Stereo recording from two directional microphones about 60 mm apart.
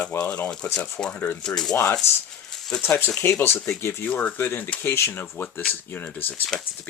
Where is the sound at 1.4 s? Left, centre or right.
Centre.